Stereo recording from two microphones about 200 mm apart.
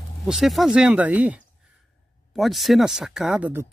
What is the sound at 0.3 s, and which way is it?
Speech, centre (ahead or behind).